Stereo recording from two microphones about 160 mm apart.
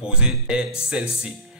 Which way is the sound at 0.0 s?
5° right (ahead or behind).